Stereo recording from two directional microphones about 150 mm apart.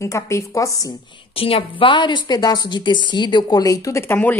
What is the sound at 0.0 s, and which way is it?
Speech, 20° left (ahead or behind).